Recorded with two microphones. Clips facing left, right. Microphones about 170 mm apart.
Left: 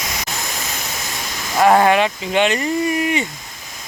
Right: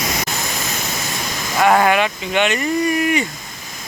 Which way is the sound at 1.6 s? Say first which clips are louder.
Left 2 dB; 30° left (ahead or behind).